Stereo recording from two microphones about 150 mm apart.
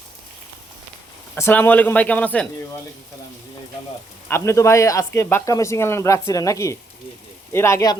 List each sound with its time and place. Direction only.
1.4 s speech: 15° left (ahead or behind)
4.3 s speech: 20° left (ahead or behind)